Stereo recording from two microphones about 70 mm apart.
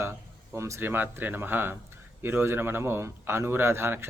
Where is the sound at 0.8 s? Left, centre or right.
Right.